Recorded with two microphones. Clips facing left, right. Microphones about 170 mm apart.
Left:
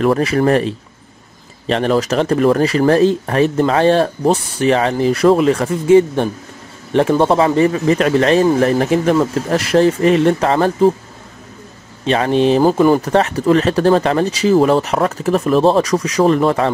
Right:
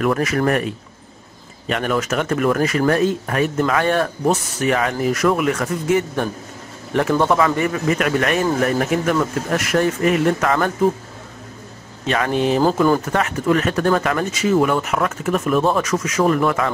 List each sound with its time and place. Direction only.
0.0 s speech: 30° left (ahead or behind)
12.1 s speech: 25° left (ahead or behind)